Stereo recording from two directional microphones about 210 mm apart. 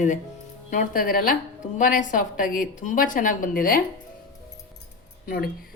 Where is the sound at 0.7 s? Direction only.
40° left (ahead or behind).